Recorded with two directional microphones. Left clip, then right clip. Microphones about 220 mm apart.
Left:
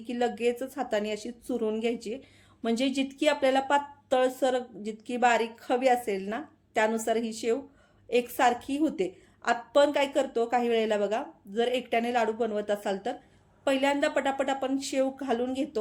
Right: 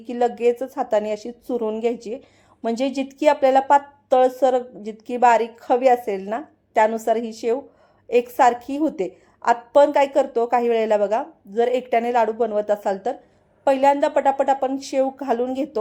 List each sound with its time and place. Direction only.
0.0 s a woman's voice: 5° right (ahead or behind)